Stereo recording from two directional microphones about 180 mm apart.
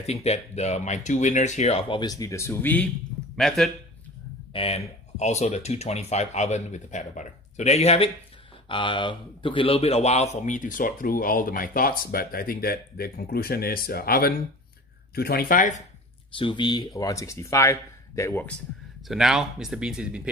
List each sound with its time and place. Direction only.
0.0 s speech: 35° left (ahead or behind); by 3.7 s centre (ahead or behind)
4.5 s speech: 35° left (ahead or behind); by 15.8 s 50° left (ahead or behind)
16.3 s speech: 25° left (ahead or behind)
19.0 s speech: centre (ahead or behind)